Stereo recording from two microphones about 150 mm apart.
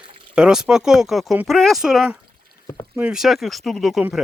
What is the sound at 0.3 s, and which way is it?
Speech, 5° right (ahead or behind).